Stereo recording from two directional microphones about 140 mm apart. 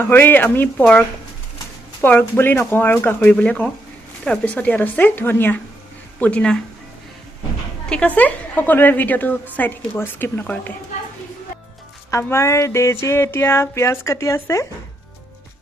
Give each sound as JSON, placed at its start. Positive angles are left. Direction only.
{"t": 0.0, "sound": "speech", "side_deg": 15}
{"t": 7.9, "sound": "speech", "side_deg": 10}
{"t": 12.1, "sound": "a sound", "side_deg": 20}